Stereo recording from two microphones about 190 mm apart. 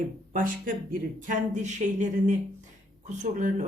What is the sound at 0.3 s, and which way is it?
Speech, 45° right (ahead or behind).